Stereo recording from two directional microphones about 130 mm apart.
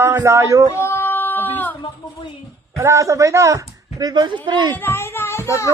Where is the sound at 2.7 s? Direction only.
25° right (ahead or behind).